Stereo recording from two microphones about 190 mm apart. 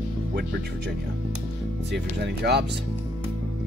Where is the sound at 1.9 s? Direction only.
60° right (ahead or behind).